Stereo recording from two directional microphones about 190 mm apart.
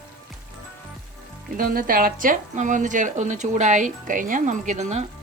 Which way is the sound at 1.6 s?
50° right (ahead or behind).